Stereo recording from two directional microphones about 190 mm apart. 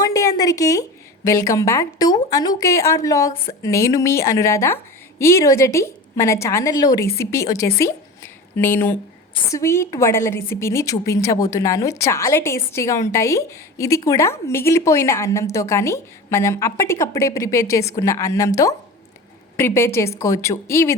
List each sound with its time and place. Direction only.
0.0 s a woman's voice: 15° left (ahead or behind)